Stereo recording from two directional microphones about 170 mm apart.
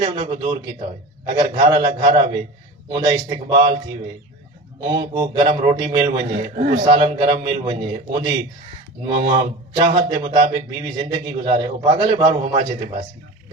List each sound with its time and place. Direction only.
0.0 s a man's voice: 25° right (ahead or behind)